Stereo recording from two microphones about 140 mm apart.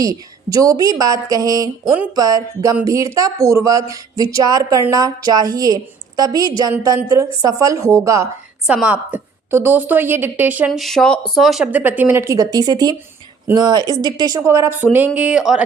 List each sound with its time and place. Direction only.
0.0 s speech: 25° right (ahead or behind)
8.6 s a woman's voice: 10° right (ahead or behind)
10.7 s a woman's voice: centre (ahead or behind)